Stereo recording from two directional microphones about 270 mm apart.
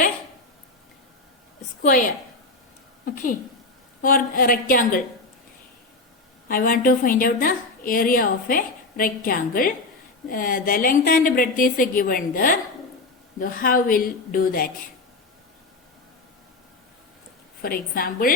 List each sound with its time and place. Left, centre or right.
1.8 s a woman's voice: left
4.0 s a woman's voice: left
6.5 s a woman's voice: left
17.6 s a woman's voice: left